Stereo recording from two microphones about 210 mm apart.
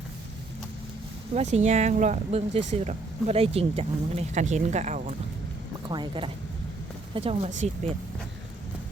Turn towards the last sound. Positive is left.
turn(degrees=-35)  # may be behind; listen again after turning